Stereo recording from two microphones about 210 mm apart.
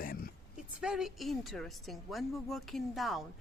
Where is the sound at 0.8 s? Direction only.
5° right (ahead or behind).